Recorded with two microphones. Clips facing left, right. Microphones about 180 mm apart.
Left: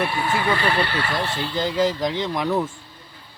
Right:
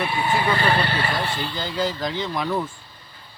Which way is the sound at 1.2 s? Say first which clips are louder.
Left 2 dB; centre (ahead or behind).